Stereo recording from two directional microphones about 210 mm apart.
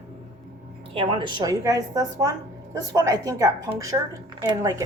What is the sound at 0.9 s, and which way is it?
A woman's voice, 25° right (ahead or behind).